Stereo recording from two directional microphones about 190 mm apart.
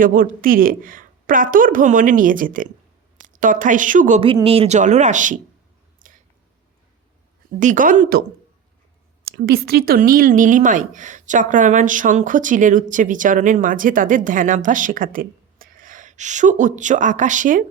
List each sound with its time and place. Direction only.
0.0 s a woman's voice: 45° right (ahead or behind)
4.2 s speech: 30° right (ahead or behind)
7.6 s speech: 45° right (ahead or behind)
9.2 s a woman's voice: 55° right (ahead or behind)